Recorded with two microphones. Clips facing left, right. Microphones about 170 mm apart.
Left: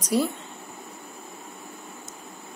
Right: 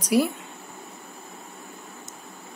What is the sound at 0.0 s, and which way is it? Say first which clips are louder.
Speech: right 2 dB; 10° right (ahead or behind).